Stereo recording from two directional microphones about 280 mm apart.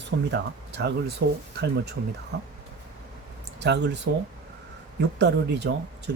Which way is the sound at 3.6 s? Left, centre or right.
Right.